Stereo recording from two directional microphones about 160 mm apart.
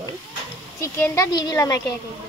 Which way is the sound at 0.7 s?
15° left (ahead or behind).